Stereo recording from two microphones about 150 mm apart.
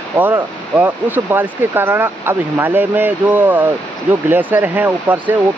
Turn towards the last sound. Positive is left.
turn(degrees=-10)  # may be behind; listen again after turning